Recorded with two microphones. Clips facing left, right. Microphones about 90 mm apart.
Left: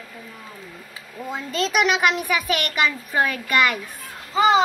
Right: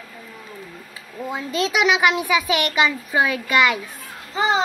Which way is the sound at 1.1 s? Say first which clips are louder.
Right 2 dB; 15° right (ahead or behind).